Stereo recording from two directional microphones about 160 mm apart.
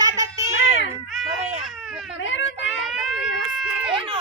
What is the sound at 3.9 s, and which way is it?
Speech, 30° right (ahead or behind).